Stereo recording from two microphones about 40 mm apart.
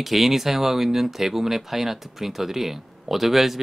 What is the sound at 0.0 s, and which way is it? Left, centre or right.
Speech, centre.